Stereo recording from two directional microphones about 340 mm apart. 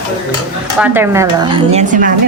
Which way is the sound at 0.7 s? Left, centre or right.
Centre.